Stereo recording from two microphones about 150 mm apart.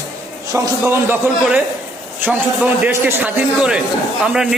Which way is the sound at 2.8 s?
10° right (ahead or behind).